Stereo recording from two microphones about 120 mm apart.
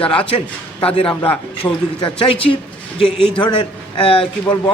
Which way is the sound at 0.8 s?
50° left (ahead or behind).